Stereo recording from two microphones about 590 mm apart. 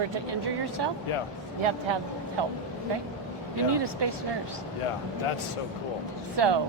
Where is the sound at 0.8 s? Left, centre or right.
Right.